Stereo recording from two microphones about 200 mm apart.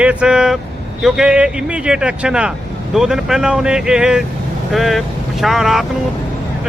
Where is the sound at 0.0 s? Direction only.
5° right (ahead or behind).